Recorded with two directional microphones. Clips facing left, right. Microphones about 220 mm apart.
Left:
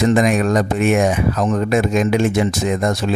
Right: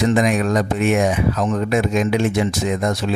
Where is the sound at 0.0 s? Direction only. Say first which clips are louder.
Left 2 dB; 45° left (ahead or behind).